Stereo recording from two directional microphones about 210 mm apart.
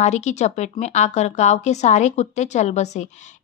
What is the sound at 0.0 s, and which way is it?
A woman's voice, 35° left (ahead or behind).